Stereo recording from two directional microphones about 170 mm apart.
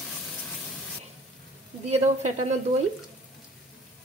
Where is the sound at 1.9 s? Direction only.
40° right (ahead or behind).